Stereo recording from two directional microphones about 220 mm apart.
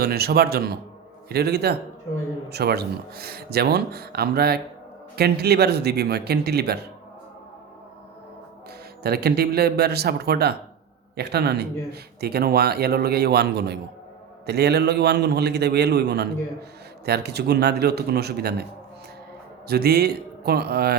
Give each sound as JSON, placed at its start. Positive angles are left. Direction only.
{"t": 0.0, "sound": "speech", "side_deg": -45}
{"t": 9.0, "sound": "speech", "side_deg": -45}
{"t": 19.6, "sound": "speech", "side_deg": -45}